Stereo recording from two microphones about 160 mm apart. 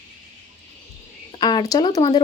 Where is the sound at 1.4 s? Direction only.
25° left (ahead or behind).